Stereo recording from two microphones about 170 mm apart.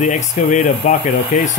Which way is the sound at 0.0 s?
45° left (ahead or behind).